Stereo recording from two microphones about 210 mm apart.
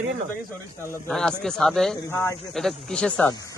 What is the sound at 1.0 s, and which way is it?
Speech, centre (ahead or behind).